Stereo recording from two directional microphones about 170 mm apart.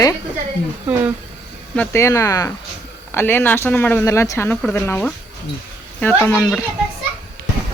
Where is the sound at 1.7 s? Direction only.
10° left (ahead or behind).